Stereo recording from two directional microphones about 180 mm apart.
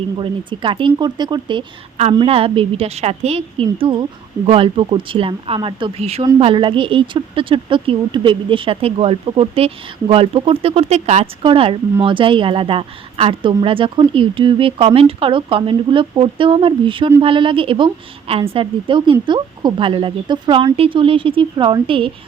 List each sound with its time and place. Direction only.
0.2 s a woman's voice: 25° right (ahead or behind)